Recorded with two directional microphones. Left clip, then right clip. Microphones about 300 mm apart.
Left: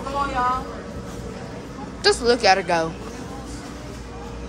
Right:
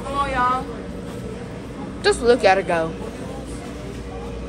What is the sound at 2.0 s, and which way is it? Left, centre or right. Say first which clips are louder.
Speech: right 2 dB; centre.